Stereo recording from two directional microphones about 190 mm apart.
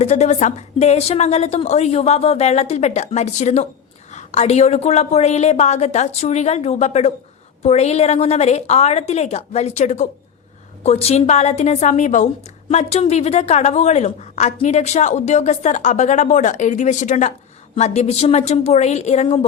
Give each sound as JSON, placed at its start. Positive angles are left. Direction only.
{"t": 0.0, "sound": "a woman's voice", "side_deg": 35}